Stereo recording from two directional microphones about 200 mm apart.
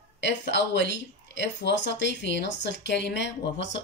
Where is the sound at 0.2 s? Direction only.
60° left (ahead or behind).